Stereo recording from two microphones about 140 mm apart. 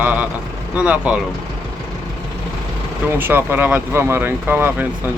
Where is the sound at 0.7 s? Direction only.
10° right (ahead or behind).